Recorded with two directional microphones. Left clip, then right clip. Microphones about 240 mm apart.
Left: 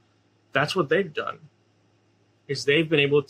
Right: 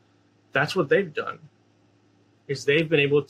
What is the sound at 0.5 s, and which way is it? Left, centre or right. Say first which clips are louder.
Speech: right 1 dB; centre.